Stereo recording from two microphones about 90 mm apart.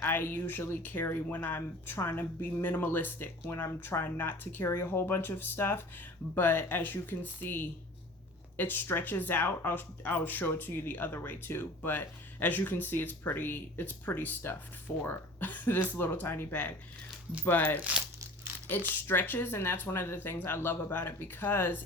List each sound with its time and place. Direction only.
0.0 s speech: 25° left (ahead or behind)